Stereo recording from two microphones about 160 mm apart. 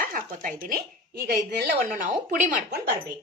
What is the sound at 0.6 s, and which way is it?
Speech, 65° right (ahead or behind).